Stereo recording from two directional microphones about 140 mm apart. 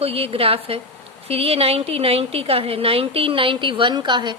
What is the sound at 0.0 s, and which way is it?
A woman's voice, 45° right (ahead or behind).